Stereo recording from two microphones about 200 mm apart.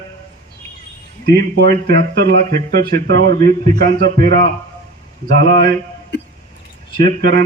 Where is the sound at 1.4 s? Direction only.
50° right (ahead or behind).